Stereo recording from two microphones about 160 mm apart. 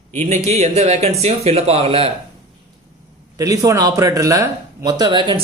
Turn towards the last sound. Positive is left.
turn(degrees=-30)  # may be behind; listen again after turning